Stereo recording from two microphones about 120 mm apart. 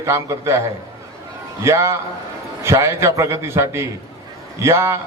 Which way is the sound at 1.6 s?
25° right (ahead or behind).